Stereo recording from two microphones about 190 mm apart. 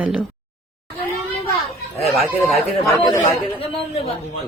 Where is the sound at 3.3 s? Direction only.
30° left (ahead or behind).